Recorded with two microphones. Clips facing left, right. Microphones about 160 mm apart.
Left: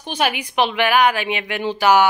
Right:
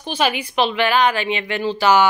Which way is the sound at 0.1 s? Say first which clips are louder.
Right 1 dB; 15° left (ahead or behind).